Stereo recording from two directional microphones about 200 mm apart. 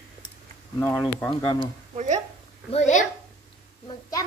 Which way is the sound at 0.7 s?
10° left (ahead or behind).